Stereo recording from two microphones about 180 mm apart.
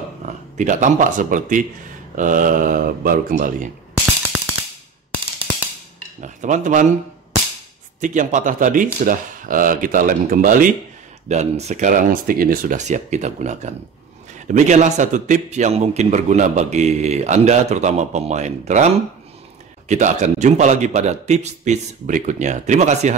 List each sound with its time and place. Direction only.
0.2 s speech: 45° right (ahead or behind)
4.0 s a sound: 5° right (ahead or behind)
6.2 s speech: 40° right (ahead or behind)
8.0 s speech: 45° right (ahead or behind)
11.2 s a man's voice: 40° right (ahead or behind)
19.9 s a man's voice: 40° right (ahead or behind)